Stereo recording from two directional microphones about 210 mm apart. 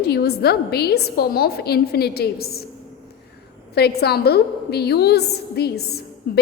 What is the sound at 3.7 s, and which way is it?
A woman's voice, 50° left (ahead or behind).